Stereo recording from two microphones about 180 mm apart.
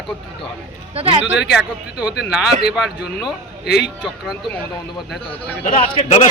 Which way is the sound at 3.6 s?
65° left (ahead or behind).